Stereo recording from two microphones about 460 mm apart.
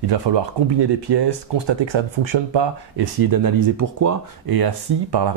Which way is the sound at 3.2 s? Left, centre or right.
Right.